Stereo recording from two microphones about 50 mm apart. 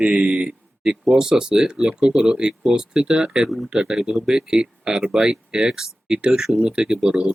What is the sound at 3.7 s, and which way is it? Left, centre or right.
Speech, centre.